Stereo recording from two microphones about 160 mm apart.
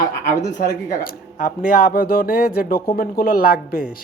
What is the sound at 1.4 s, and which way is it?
Speech, 65° left (ahead or behind).